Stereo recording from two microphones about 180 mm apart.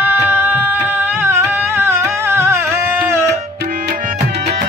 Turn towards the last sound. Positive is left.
turn(degrees=-15)  # may be behind; listen again after turning